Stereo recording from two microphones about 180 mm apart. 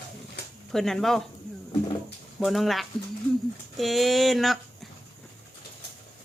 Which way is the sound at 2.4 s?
Centre (ahead or behind).